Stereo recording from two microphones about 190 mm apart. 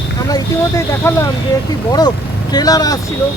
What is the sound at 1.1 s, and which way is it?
Speech, 15° left (ahead or behind).